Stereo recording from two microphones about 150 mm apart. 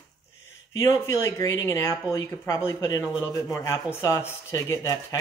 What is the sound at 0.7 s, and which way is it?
Speech, 20° left (ahead or behind).